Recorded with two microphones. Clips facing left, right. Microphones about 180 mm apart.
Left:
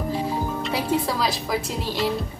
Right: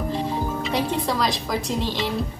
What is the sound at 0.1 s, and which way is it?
Speech, centre (ahead or behind).